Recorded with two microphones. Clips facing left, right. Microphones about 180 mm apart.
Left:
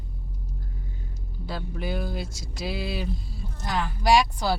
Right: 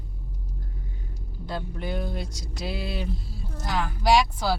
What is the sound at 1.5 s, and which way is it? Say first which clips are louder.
Speech: even; 5° left (ahead or behind).